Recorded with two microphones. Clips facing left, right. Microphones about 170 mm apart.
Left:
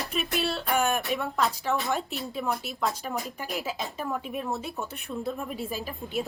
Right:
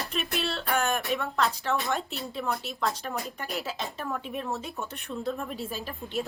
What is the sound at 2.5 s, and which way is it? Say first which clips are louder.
Speech: left 1 dB; 10° left (ahead or behind).